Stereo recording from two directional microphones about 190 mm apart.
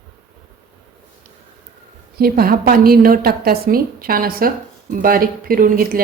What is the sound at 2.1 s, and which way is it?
A woman's voice, 55° right (ahead or behind).